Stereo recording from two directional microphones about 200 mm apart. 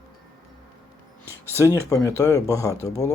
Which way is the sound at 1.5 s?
15° left (ahead or behind).